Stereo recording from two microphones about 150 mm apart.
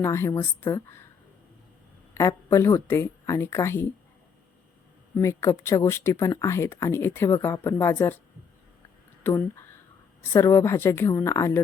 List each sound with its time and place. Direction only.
0.0 s speech: 15° left (ahead or behind)
2.1 s speech: 20° left (ahead or behind)
5.1 s speech: 20° left (ahead or behind)
9.2 s speech: 15° left (ahead or behind)